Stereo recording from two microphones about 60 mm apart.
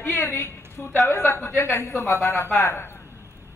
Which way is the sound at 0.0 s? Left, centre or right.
Left.